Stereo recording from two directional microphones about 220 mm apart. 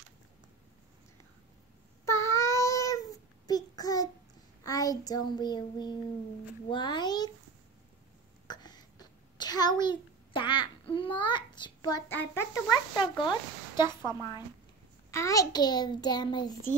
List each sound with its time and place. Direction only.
2.0 s child singing: 10° left (ahead or behind)
4.6 s speech: 15° left (ahead or behind)
8.5 s a sound: 20° left (ahead or behind)
12.1 s a child's voice: 10° left (ahead or behind)
12.9 s speech: 20° left (ahead or behind)